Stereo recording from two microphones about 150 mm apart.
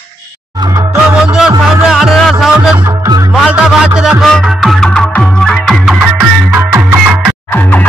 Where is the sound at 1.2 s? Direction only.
5° right (ahead or behind).